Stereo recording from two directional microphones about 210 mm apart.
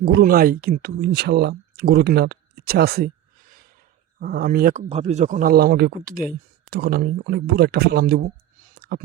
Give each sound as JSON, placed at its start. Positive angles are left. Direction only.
{"t": 0.0, "sound": "speech", "side_deg": -45}
{"t": 8.6, "sound": "clicking", "side_deg": -45}